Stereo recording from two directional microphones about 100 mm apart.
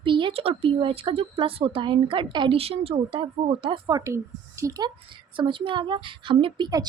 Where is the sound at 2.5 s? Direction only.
75° right (ahead or behind).